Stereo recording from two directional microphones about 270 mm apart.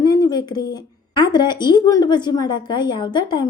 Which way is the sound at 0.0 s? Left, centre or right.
Centre.